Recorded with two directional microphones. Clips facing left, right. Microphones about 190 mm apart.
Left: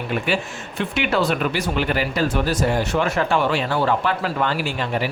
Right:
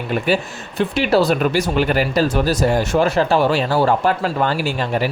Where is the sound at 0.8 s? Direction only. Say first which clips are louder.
Right 5 dB; 35° right (ahead or behind).